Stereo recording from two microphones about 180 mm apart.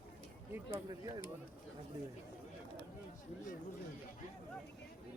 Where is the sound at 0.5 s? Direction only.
15° right (ahead or behind).